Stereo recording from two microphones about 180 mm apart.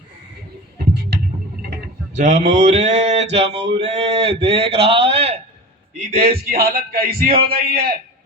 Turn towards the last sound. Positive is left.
turn(degrees=-55)  # may be behind; listen again after turning